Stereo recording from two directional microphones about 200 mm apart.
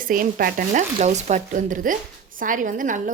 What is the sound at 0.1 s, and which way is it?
A woman's voice, 45° right (ahead or behind).